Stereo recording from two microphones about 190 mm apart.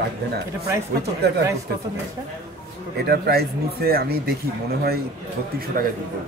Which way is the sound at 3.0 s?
55° right (ahead or behind).